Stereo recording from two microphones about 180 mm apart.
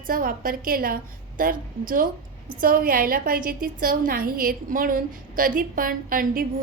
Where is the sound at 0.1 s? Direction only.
50° right (ahead or behind).